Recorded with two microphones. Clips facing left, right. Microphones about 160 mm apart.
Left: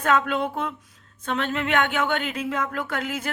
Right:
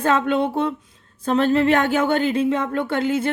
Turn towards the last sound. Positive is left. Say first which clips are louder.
# right 8 dB
turn(degrees=-30)  # may be behind; listen again after turning